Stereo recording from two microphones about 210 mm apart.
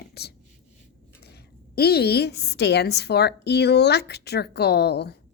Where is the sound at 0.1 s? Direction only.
50° left (ahead or behind).